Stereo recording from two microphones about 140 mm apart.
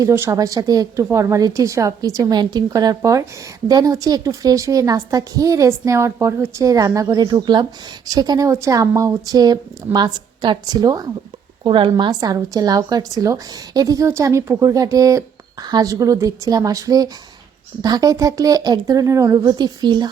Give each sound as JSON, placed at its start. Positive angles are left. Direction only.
{"t": 0.0, "sound": "a woman's voice", "side_deg": -20}